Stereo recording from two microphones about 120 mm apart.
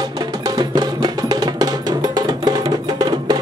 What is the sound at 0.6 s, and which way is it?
Music, 35° right (ahead or behind).